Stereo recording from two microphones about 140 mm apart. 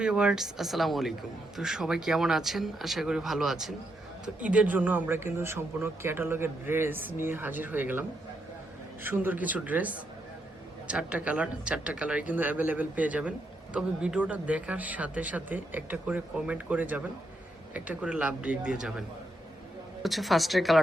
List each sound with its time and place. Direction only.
0.0 s a man's voice: 5° right (ahead or behind)
9.0 s a man's voice: 15° right (ahead or behind)